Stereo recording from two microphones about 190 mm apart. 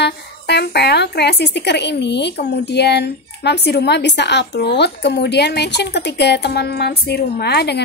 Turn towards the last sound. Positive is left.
turn(degrees=60)  # may be behind; listen again after turning